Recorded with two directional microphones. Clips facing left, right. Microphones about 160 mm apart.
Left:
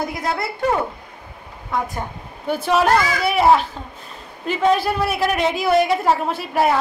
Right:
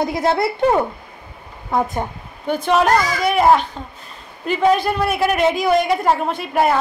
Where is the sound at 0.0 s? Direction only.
25° right (ahead or behind).